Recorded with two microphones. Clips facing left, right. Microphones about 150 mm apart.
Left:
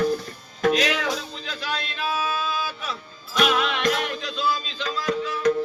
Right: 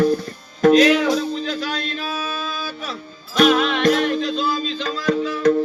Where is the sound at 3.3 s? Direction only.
35° right (ahead or behind).